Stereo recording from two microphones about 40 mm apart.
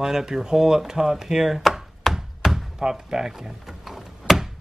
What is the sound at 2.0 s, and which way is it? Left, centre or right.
Tap, centre.